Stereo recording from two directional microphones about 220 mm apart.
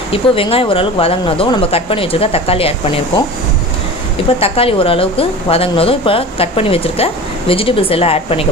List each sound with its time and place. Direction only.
0.1 s a woman's voice: 25° left (ahead or behind)
4.3 s a woman's voice: 25° left (ahead or behind)